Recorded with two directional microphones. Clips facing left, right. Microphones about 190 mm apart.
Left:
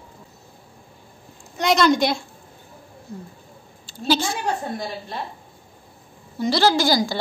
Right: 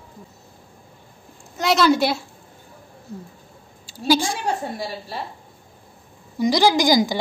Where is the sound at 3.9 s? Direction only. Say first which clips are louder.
Right 2 dB; 10° right (ahead or behind).